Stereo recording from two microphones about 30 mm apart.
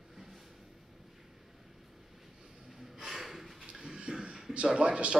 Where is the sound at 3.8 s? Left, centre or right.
Right.